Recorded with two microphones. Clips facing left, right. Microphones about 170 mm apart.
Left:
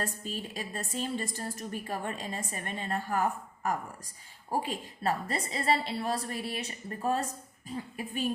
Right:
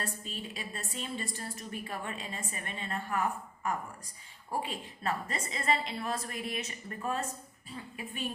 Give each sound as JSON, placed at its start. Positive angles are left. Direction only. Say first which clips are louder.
{"t": 0.0, "sound": "a woman's voice", "louder": "left 4 dB", "side_deg": 40}